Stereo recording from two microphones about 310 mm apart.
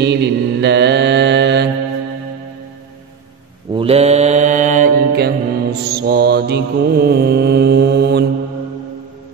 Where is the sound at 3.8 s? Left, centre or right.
Centre.